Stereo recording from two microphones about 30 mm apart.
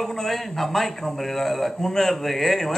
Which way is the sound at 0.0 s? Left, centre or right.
Centre.